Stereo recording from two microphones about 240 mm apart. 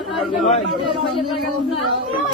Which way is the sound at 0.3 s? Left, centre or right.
Left.